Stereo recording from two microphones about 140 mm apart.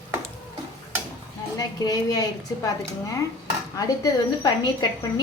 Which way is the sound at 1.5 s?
25° left (ahead or behind).